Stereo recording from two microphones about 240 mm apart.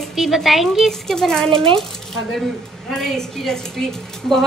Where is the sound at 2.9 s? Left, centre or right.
Centre.